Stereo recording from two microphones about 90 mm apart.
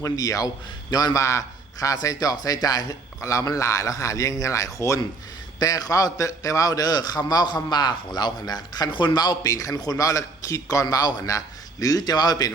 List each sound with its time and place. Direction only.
0.0 s a man's voice: 40° left (ahead or behind)
8.9 s a man's voice: 60° left (ahead or behind)